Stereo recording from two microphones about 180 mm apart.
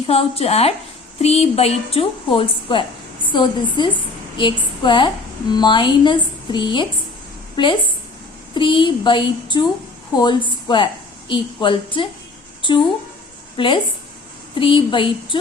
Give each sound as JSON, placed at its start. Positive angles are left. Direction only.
{"t": 0.1, "sound": "a woman's voice", "side_deg": 35}
{"t": 13.6, "sound": "a woman's voice", "side_deg": 25}